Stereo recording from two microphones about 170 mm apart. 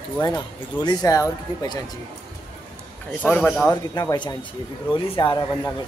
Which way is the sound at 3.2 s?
10° left (ahead or behind).